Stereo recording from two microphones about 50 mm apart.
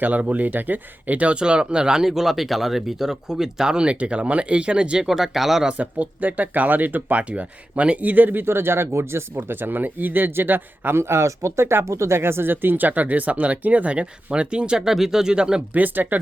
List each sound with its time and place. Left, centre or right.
0.0 s speech: right
5.0 s speech: centre
5.6 s speech: right
7.2 s speech: right
8.4 s speech: right
9.3 s speech: right
10.9 s speech: right
14.8 s speech: centre
15.7 s speech: right